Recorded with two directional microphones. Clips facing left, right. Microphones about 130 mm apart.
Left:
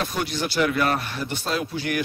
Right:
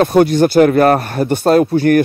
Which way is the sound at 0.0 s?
55° right (ahead or behind).